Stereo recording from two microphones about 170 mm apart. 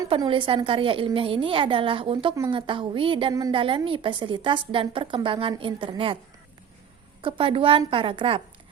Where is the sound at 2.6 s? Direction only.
30° right (ahead or behind).